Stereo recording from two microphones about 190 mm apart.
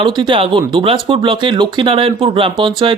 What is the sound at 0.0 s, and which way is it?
Speech, 25° right (ahead or behind).